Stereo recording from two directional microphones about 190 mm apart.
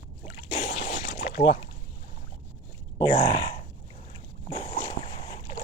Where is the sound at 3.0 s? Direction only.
25° left (ahead or behind).